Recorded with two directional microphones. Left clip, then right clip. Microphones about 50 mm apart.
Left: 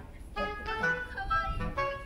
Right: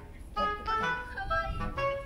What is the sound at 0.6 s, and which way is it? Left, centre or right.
Music, centre.